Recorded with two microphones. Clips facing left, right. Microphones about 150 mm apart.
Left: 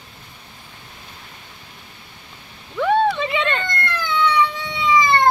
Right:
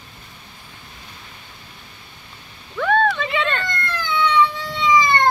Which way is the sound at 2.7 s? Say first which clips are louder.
Left 1 dB; 15° left (ahead or behind).